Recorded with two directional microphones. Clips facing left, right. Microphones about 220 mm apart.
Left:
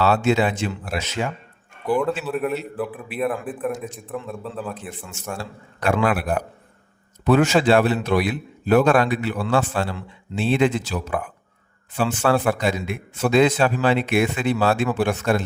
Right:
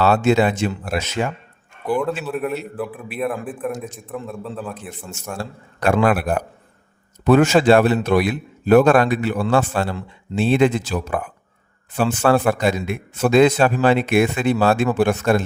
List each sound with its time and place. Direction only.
0.0 s a man's voice: 45° right (ahead or behind)
1.9 s a man's voice: centre (ahead or behind)
5.8 s a man's voice: 40° right (ahead or behind)
7.3 s a man's voice: 50° right (ahead or behind)